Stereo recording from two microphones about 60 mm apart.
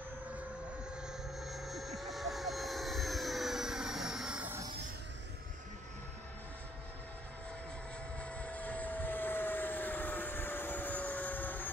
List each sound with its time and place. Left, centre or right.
1.0 s vehicle: centre
8.2 s vehicle: left